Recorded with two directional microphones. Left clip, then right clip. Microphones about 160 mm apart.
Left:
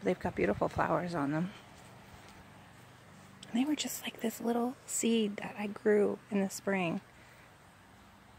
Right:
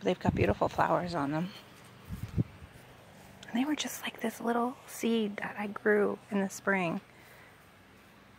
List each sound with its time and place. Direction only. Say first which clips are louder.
0.0 s speech: right 2 dB; centre (ahead or behind)
3.3 s a woman's voice: right 1 dB; 10° left (ahead or behind)